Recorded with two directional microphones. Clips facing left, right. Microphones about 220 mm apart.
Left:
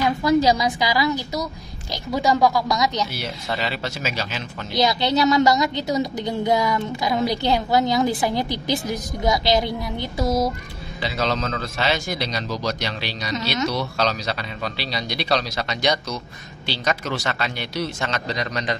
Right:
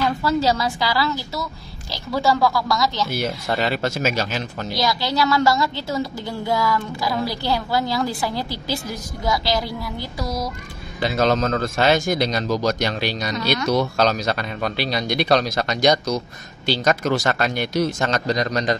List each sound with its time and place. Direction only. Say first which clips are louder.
0.0 s a woman's voice: left 2 dB; 15° left (ahead or behind)
3.1 s speech: right 5 dB; 50° right (ahead or behind)
4.7 s a woman's voice: left 3 dB; 20° left (ahead or behind)
11.0 s speech: right 5 dB; 50° right (ahead or behind)